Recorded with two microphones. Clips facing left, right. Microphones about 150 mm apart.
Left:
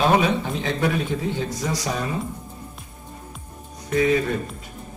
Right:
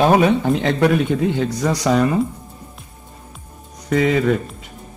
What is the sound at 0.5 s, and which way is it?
Speech, 65° right (ahead or behind).